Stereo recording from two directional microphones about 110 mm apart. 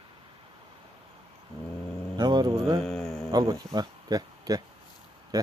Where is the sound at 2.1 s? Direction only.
40° right (ahead or behind).